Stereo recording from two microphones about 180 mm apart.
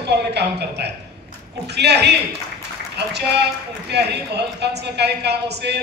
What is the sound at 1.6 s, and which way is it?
A woman's voice, 65° right (ahead or behind).